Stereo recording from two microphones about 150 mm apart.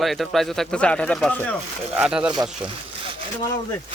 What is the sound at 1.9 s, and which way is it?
Speech, 5° right (ahead or behind).